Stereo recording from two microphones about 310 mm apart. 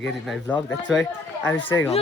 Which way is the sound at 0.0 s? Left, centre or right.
Centre.